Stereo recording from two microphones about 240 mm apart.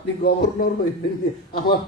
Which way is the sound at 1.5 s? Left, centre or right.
Left.